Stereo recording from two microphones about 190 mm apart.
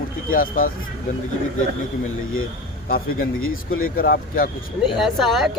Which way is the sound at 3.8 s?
50° left (ahead or behind).